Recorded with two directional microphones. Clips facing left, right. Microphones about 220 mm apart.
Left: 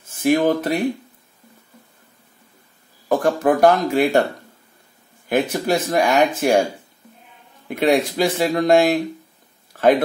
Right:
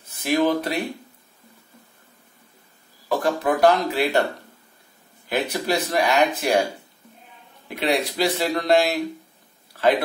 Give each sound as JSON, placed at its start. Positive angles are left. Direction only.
{"t": 0.0, "sound": "speech", "side_deg": 50}
{"t": 3.1, "sound": "speech", "side_deg": 50}
{"t": 5.3, "sound": "speech", "side_deg": 50}
{"t": 7.6, "sound": "speech", "side_deg": 50}
{"t": 9.7, "sound": "a sound", "side_deg": 50}